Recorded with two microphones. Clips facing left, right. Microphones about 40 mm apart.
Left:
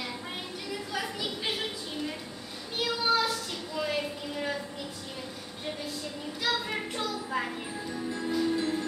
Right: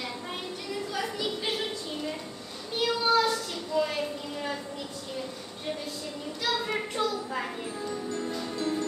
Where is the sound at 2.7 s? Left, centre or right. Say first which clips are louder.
Right 3 dB; centre.